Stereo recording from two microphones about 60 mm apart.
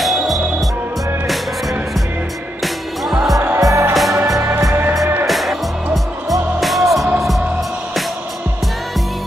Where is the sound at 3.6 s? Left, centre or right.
Right.